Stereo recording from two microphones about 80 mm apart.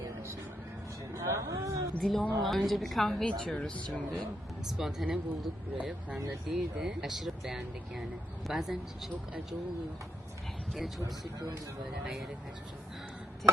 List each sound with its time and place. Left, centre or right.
1.1 s a sound: right
2.0 s speech: centre
4.8 s speech: centre
5.7 s speech: centre
6.5 s speech: centre
10.8 s speech: centre
13.4 s a sound: centre